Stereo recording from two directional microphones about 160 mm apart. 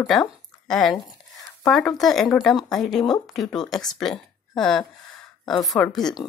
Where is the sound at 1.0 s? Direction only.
25° left (ahead or behind).